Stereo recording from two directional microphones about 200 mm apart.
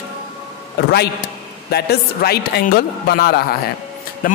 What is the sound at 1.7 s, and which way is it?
A man's voice, 55° left (ahead or behind).